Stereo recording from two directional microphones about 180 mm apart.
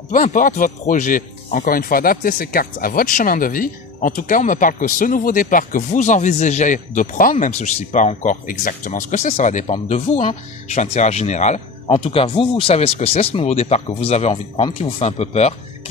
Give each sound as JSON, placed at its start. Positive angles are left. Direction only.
{"t": 0.1, "sound": "speech", "side_deg": 45}